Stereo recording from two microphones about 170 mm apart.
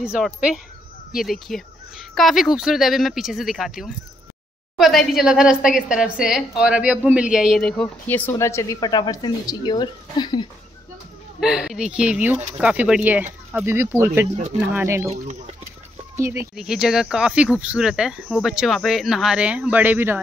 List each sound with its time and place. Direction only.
0.0 s a woman's voice: 5° right (ahead or behind); by 10.5 s 25° left (ahead or behind)
11.3 s a woman's voice: 5° right (ahead or behind)
16.2 s speech: 15° right (ahead or behind)
16.5 s a woman's voice: 5° right (ahead or behind)